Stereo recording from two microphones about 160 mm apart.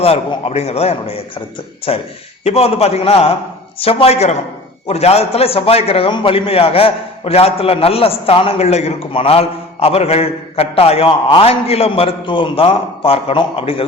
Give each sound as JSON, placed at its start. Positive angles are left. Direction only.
{"t": 0.0, "sound": "a man's voice", "side_deg": 40}